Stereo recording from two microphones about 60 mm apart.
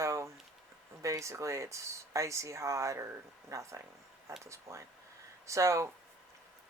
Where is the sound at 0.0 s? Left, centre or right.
Right.